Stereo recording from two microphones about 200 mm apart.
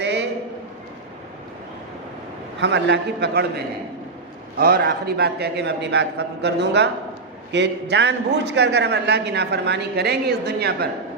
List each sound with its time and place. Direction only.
0.0 s a sound: 60° right (ahead or behind)
2.6 s a man's voice: 60° right (ahead or behind)
4.6 s a man's voice: 50° right (ahead or behind)